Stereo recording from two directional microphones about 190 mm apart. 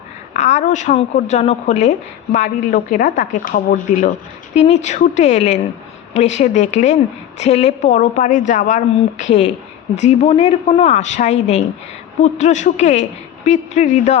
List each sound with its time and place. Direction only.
0.3 s a woman's voice: 40° left (ahead or behind)